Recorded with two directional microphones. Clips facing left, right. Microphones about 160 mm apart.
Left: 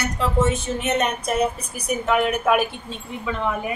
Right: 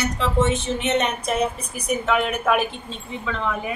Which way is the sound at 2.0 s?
5° left (ahead or behind).